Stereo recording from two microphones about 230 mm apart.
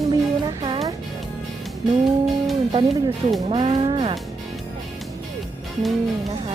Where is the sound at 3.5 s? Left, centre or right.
Right.